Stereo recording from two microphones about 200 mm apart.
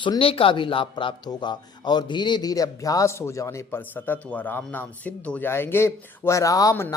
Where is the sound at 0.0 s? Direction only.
25° left (ahead or behind).